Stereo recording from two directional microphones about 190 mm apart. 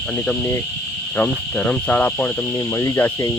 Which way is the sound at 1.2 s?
10° left (ahead or behind).